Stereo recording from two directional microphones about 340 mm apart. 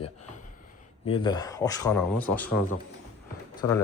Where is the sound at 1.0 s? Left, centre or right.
Centre.